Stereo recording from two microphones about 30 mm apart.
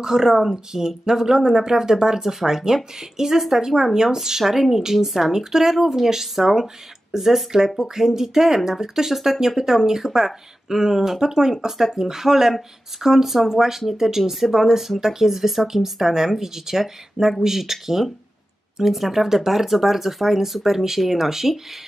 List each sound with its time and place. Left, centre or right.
0.0 s speech: centre